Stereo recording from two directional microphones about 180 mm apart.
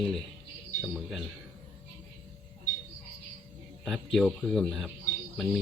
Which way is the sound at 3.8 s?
Centre (ahead or behind).